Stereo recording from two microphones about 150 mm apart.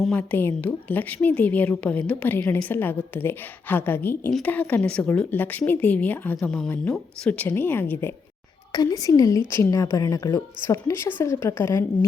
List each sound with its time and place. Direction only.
0.1 s a woman's voice: 10° left (ahead or behind)
8.7 s a woman's voice: 25° left (ahead or behind)